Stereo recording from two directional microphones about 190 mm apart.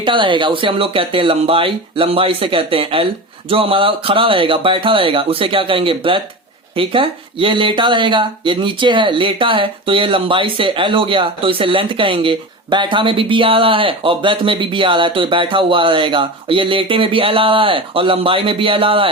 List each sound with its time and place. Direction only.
0.0 s speech: 25° right (ahead or behind)